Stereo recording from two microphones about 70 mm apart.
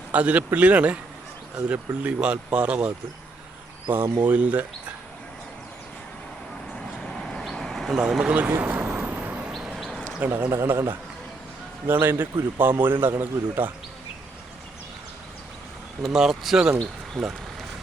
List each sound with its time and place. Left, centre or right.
0.1 s speech: centre
4.2 s speech: centre
6.7 s vehicle: centre
7.9 s speech: centre
8.4 s vehicle: right
10.2 s speech: right
10.5 s speech: right
16.0 s speech: centre
17.2 s speech: centre